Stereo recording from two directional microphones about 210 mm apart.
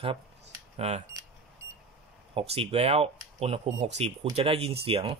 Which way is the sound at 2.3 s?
25° right (ahead or behind).